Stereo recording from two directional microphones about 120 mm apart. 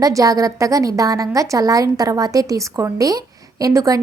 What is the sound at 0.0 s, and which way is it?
A woman's voice, 30° right (ahead or behind).